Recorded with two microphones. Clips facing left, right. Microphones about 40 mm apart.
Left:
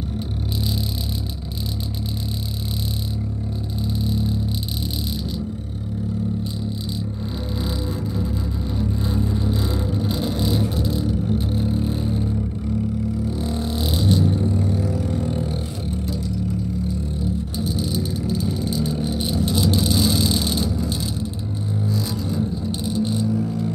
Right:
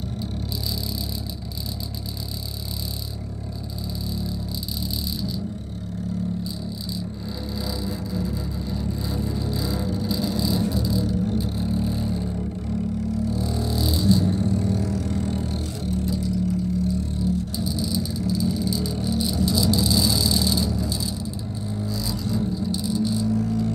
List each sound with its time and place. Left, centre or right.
4.0 s guitar: left
7.6 s music: left
8.7 s vehicle: left
11.5 s vehicle: left
13.3 s a sound: left
14.2 s vehicle: left
17.6 s vehicle: left
23.2 s music: centre